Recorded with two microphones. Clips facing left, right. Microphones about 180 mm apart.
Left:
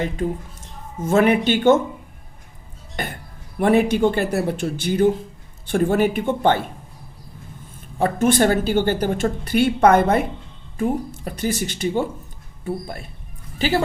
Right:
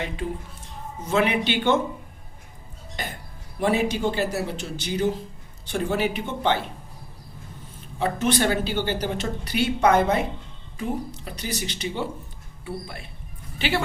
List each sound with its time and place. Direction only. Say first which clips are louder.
0.9 s speech: left 6 dB; 50° left (ahead or behind)
3.0 s speech: left 5 dB; 55° left (ahead or behind)
7.9 s a woman's voice: left 5 dB; 50° left (ahead or behind)